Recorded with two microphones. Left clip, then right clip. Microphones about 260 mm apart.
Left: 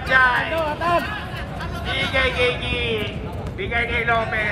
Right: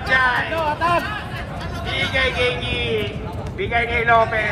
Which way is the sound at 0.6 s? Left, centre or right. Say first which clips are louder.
Right 2 dB; right.